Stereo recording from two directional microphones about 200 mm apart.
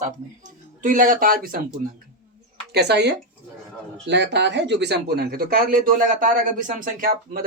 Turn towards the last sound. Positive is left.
turn(degrees=-45)  # may be behind; listen again after turning